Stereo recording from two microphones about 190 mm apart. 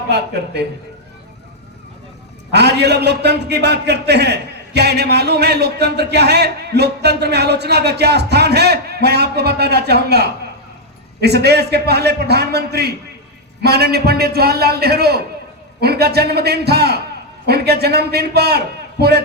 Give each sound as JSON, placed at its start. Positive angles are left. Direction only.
{"t": 2.5, "sound": "a man's voice", "side_deg": -60}